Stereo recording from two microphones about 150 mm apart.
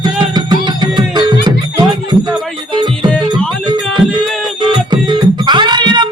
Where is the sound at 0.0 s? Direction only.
30° right (ahead or behind).